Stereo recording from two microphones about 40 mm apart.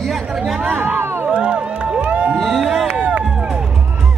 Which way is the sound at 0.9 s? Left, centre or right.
Right.